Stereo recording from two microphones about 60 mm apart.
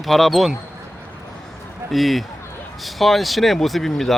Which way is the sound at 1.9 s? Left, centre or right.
Centre.